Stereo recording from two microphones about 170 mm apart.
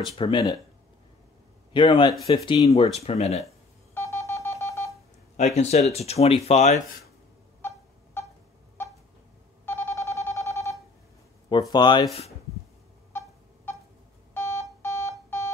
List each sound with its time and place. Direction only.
0.0 s speech: 30° left (ahead or behind)
1.7 s a man's voice: 30° left (ahead or behind)
3.9 s telephone dialing: 15° left (ahead or behind)
5.4 s speech: 40° left (ahead or behind)
7.6 s a sound: 15° left (ahead or behind)
9.7 s telephone dialing: 15° left (ahead or behind)
11.7 s speech: 25° left (ahead or behind)
13.1 s a sound: 15° left (ahead or behind)
14.3 s alarm clock: 15° left (ahead or behind)